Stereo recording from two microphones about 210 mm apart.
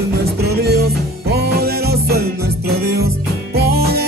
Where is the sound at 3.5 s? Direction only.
50° right (ahead or behind).